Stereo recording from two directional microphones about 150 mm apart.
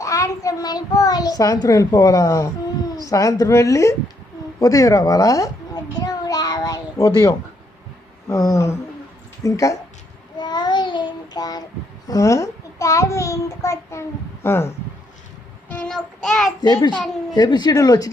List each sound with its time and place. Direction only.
0.0 s a child's voice: 20° left (ahead or behind)
4.6 s a sound: 20° left (ahead or behind)
8.3 s a woman's voice: 20° left (ahead or behind)
10.3 s child singing: 30° left (ahead or behind)
12.0 s a child's voice: 20° left (ahead or behind)
15.7 s child singing: 5° left (ahead or behind)
16.6 s a woman's voice: 30° left (ahead or behind)